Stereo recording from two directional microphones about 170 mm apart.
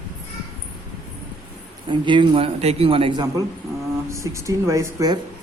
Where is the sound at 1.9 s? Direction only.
30° right (ahead or behind).